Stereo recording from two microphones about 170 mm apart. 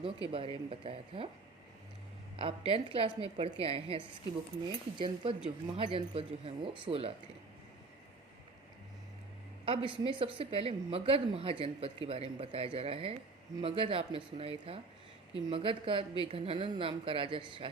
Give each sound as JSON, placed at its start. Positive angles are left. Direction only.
{"t": 0.3, "sound": "speech", "side_deg": -30}
{"t": 2.4, "sound": "speech", "side_deg": -30}
{"t": 9.6, "sound": "speech", "side_deg": -30}